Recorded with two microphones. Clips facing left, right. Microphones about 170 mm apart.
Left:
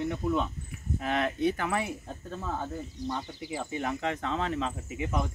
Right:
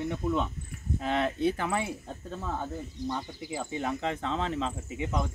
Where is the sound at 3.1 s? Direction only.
10° right (ahead or behind).